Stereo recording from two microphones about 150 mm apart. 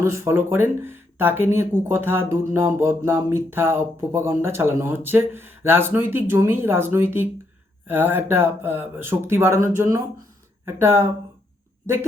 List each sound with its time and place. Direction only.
0.0 s speech: 15° right (ahead or behind)